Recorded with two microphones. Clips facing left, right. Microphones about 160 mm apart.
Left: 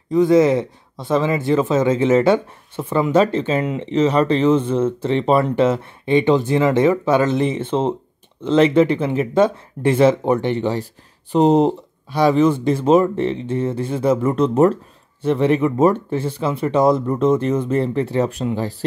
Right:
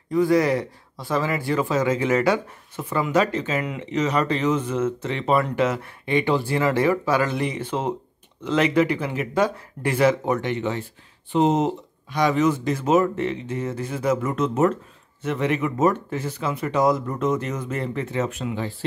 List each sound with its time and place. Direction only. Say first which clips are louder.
0.1 s speech: left 5 dB; 20° left (ahead or behind); by 18.9 s 40° left (ahead or behind)